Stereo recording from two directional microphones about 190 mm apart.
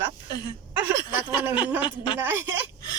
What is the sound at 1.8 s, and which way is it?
Speech, 25° left (ahead or behind).